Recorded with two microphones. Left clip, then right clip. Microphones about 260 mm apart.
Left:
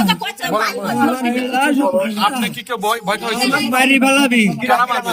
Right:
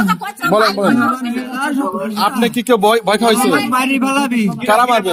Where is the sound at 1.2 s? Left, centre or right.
Centre.